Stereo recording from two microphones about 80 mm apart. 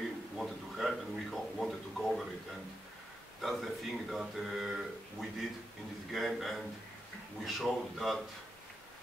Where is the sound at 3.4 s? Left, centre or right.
Centre.